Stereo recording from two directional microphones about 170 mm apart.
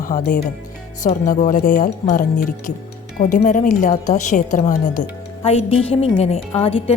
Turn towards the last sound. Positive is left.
turn(degrees=35)  # may be behind; listen again after turning